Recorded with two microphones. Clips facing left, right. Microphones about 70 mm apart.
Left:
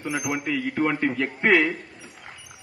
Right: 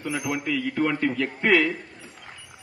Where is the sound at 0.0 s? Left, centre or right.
Left.